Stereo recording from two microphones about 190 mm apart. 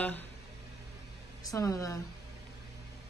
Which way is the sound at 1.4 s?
15° left (ahead or behind).